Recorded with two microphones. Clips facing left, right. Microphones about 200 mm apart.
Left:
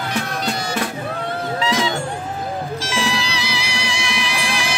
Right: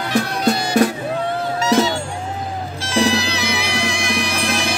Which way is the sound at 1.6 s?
45° right (ahead or behind).